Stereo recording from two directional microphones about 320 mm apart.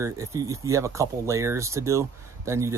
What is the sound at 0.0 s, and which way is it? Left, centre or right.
Speech, centre.